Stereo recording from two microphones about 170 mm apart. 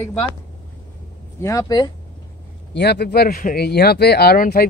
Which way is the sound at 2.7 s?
75° left (ahead or behind).